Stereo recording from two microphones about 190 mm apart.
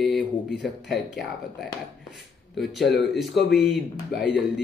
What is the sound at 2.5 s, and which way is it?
Speech, centre (ahead or behind).